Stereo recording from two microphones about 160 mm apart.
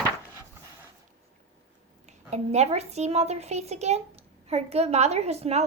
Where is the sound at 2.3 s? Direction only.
45° right (ahead or behind).